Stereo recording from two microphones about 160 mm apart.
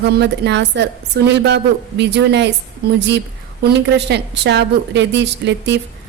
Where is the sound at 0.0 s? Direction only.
90° right.